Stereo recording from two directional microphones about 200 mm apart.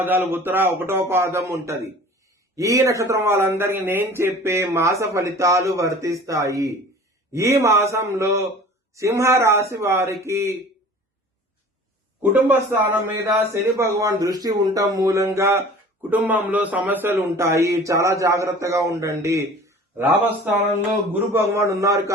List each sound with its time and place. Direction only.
0.0 s a man's voice: 10° right (ahead or behind)
12.3 s a man's voice: 10° right (ahead or behind)